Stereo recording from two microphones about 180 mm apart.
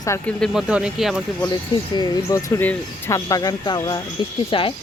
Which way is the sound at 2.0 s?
15° left (ahead or behind).